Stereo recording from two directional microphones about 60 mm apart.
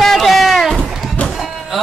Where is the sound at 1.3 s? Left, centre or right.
Centre.